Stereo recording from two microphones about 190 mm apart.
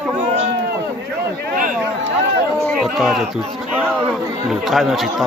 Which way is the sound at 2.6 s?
Centre (ahead or behind).